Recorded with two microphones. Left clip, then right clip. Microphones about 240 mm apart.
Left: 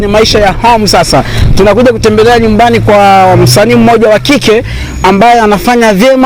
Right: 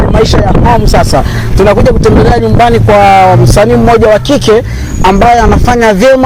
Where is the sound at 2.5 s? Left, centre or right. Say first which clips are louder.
Even; left.